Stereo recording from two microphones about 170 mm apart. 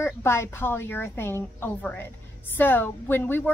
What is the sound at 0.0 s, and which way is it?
Speech, 15° left (ahead or behind).